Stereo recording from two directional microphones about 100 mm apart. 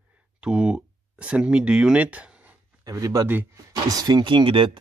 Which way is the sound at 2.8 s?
40° right (ahead or behind).